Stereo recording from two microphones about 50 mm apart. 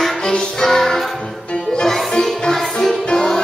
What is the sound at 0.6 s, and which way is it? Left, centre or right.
Music, centre.